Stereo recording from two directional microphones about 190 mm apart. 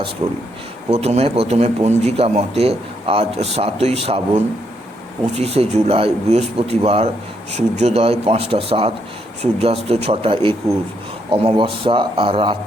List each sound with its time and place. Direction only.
0.2 s a man's voice: 35° right (ahead or behind)